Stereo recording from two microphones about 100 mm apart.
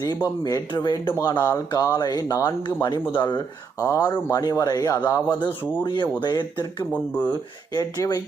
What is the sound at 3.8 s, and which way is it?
Speech, 35° left (ahead or behind).